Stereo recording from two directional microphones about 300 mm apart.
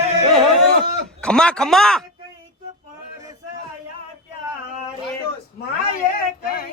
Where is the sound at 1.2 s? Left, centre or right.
Centre.